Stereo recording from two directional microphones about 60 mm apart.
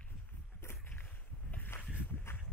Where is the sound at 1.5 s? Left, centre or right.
Left.